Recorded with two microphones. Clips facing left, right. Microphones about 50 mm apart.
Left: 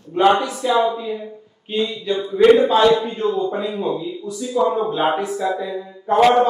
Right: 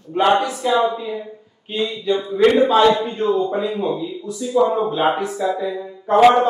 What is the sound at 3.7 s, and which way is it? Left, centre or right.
Speech, centre.